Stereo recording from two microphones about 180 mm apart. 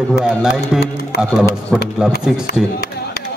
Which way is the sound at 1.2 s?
Centre (ahead or behind).